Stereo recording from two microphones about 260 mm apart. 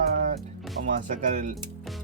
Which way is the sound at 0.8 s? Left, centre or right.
Right.